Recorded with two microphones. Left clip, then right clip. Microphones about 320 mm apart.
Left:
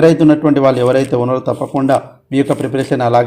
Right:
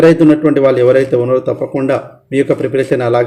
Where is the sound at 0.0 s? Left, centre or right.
Centre.